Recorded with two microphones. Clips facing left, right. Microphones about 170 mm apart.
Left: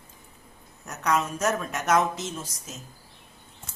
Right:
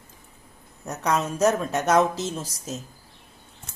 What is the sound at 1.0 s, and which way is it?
Speech, 30° right (ahead or behind).